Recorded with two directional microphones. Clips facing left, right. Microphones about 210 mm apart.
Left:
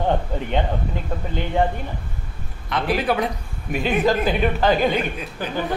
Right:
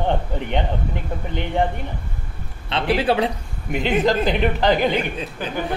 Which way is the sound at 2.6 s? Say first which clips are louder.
Right 2 dB; 25° right (ahead or behind).